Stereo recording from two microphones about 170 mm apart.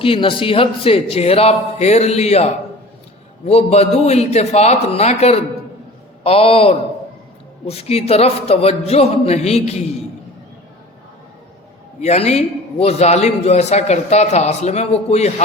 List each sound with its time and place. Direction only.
0.0 s a man's voice: 30° left (ahead or behind)
11.9 s a man's voice: 40° left (ahead or behind)